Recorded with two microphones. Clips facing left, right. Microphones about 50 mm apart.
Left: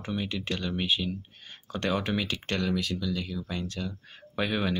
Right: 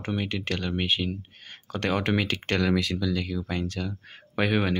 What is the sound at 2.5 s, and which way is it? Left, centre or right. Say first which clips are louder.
Speech: right 4 dB; right.